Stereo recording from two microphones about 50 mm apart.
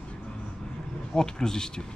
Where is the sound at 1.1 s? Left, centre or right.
Centre.